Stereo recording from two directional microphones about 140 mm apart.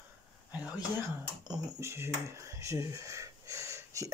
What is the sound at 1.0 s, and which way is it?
Speech, 20° right (ahead or behind).